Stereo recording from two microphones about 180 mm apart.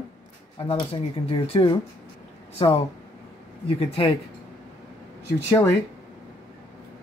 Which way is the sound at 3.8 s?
35° left (ahead or behind).